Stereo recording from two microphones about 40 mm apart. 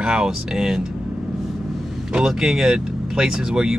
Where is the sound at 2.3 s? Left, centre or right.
Centre.